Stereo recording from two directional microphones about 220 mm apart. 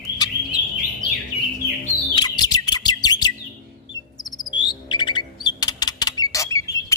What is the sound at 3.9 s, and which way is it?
Chirp, 15° left (ahead or behind).